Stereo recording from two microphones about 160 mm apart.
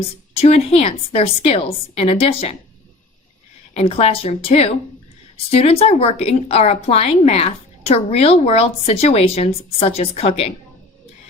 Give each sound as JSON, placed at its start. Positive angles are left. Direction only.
{"t": 0.0, "sound": "speech", "side_deg": 40}
{"t": 3.8, "sound": "speech", "side_deg": 40}